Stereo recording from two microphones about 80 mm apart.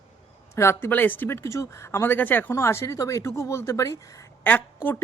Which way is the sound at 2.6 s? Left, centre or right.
Left.